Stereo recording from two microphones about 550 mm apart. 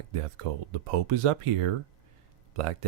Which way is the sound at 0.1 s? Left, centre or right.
Right.